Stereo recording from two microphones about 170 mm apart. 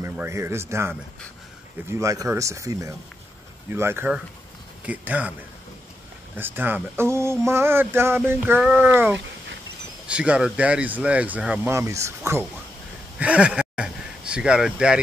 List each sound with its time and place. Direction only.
0.0 s speech: 15° right (ahead or behind)
6.3 s speech: 10° right (ahead or behind)
13.2 s speech: 5° right (ahead or behind)